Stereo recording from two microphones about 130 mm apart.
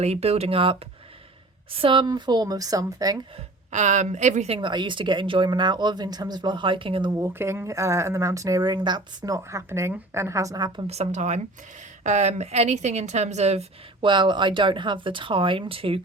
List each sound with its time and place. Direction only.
0.0 s speech: 55° right (ahead or behind); by 3.2 s 30° right (ahead or behind)
3.7 s a woman's voice: 65° right (ahead or behind)
4.6 s speech: 35° right (ahead or behind)
7.2 s speech: 20° right (ahead or behind)
10.8 s a woman's voice: 55° right (ahead or behind)
14.0 s speech: 35° right (ahead or behind)